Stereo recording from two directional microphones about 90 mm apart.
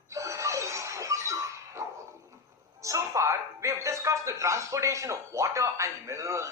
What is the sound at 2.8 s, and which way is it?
A man's voice, 35° right (ahead or behind).